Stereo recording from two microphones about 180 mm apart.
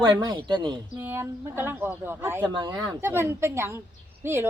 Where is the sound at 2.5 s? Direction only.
25° right (ahead or behind).